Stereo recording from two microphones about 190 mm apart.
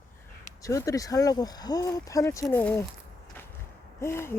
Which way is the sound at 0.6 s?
15° left (ahead or behind).